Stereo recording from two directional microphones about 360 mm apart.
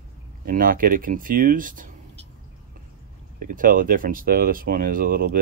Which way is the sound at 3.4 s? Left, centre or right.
Right.